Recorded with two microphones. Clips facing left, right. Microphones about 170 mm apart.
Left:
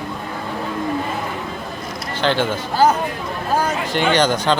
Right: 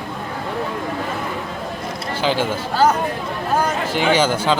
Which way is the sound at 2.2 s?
5° right (ahead or behind).